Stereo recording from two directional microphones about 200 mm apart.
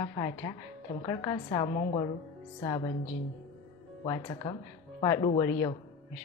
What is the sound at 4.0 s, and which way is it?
A woman's voice, 20° left (ahead or behind).